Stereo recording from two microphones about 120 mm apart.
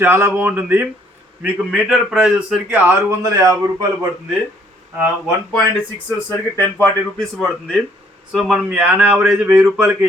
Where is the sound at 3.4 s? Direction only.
30° right (ahead or behind).